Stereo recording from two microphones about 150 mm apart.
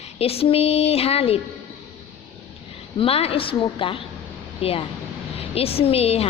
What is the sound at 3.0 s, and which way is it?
A woman's voice, 40° left (ahead or behind).